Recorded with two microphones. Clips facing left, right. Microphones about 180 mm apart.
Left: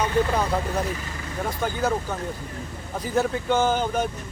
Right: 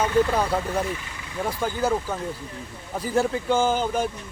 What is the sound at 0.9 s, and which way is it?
Speech, 45° left (ahead or behind).